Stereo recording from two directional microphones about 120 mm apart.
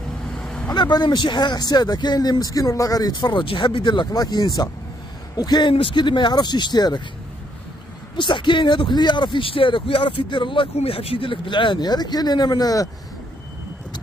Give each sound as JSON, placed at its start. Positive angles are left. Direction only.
{"t": 0.3, "sound": "vehicle", "side_deg": 5}
{"t": 0.7, "sound": "speech", "side_deg": 35}
{"t": 8.2, "sound": "a man's voice", "side_deg": 45}